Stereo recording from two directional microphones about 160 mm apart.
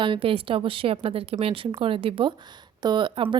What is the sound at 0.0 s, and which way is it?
Speech, 35° right (ahead or behind).